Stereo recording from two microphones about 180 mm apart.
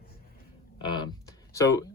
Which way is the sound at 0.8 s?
25° left (ahead or behind).